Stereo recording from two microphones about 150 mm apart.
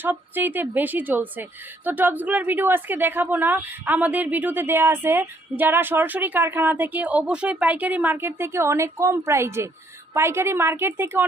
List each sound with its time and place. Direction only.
0.0 s a woman's voice: 10° right (ahead or behind)